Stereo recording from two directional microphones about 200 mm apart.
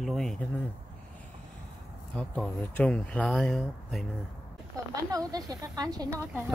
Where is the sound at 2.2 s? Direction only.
5° left (ahead or behind).